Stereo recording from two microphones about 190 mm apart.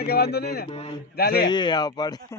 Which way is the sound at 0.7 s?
30° left (ahead or behind).